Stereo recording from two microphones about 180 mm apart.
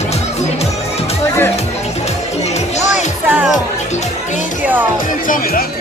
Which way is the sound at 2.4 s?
40° left (ahead or behind).